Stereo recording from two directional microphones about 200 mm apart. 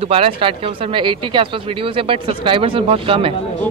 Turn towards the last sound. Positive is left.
turn(degrees=-25)  # may be behind; listen again after turning